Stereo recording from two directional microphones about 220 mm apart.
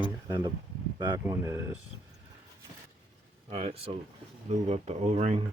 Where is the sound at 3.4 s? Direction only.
25° right (ahead or behind).